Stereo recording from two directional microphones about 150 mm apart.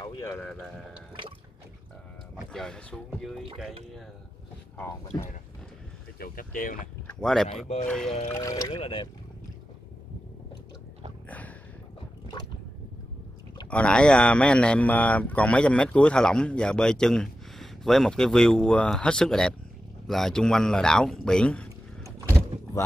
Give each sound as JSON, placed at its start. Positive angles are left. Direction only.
{"t": 0.2, "sound": "speech", "side_deg": 10}
{"t": 2.5, "sound": "a man's voice", "side_deg": 5}
{"t": 6.1, "sound": "speech", "side_deg": 75}
{"t": 7.1, "sound": "speech", "side_deg": 5}
{"t": 8.3, "sound": "speech", "side_deg": 20}
{"t": 8.8, "sound": "speech", "side_deg": 35}
{"t": 11.2, "sound": "a sound", "side_deg": 10}
{"t": 13.7, "sound": "a man's voice", "side_deg": 5}
{"t": 22.5, "sound": "vehicle", "side_deg": -50}